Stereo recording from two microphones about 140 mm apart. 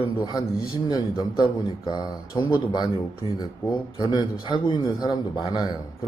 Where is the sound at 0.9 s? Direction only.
25° left (ahead or behind).